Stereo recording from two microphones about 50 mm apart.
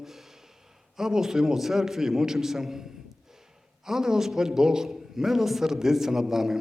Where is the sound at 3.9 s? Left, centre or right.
Centre.